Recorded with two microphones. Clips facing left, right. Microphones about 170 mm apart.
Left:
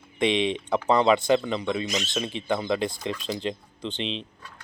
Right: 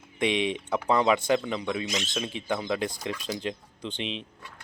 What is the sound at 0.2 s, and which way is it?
Speech, 10° right (ahead or behind).